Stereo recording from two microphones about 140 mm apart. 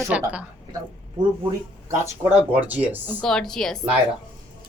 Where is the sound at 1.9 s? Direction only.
20° right (ahead or behind).